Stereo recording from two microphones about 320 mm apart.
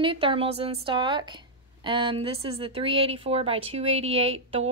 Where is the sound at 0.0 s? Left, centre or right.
Centre.